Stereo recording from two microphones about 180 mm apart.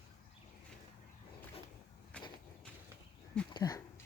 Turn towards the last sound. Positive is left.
turn(degrees=20)  # may be behind; listen again after turning